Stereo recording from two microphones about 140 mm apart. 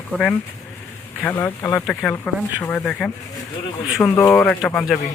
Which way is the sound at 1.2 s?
15° left (ahead or behind).